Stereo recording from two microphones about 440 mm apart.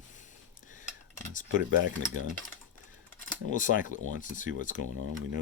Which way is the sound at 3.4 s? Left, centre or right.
Centre.